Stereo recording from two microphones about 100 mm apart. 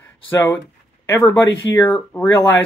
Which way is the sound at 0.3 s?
20° left (ahead or behind).